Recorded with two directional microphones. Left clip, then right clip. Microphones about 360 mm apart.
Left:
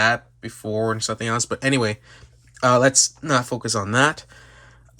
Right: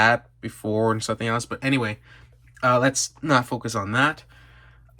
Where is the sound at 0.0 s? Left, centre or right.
Centre.